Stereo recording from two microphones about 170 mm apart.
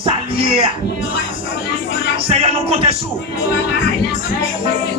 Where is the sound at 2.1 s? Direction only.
35° right (ahead or behind).